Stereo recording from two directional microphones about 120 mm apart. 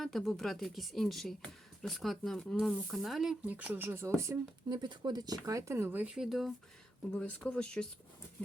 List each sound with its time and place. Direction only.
0.0 s speech: centre (ahead or behind); by 4.4 s 25° right (ahead or behind)
4.7 s speech: 40° right (ahead or behind); by 6.5 s centre (ahead or behind)
7.1 s speech: 10° left (ahead or behind)